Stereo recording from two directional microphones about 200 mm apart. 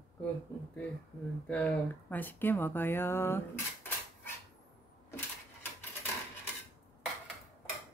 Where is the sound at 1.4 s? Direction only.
5° left (ahead or behind).